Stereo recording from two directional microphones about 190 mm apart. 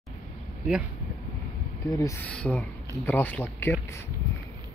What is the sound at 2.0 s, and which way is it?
Speech, 15° left (ahead or behind).